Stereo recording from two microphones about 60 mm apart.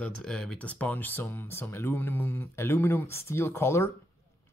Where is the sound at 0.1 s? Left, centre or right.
Centre.